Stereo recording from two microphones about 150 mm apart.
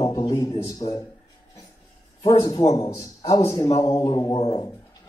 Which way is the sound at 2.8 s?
25° left (ahead or behind).